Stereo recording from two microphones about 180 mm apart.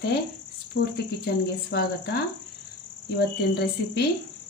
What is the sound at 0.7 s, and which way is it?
Cricket, 45° left (ahead or behind).